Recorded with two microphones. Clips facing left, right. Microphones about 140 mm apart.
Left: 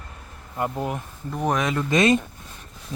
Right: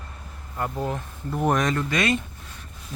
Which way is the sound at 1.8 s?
20° left (ahead or behind).